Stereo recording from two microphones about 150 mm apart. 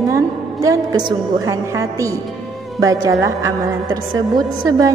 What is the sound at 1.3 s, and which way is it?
A woman's voice, 20° right (ahead or behind).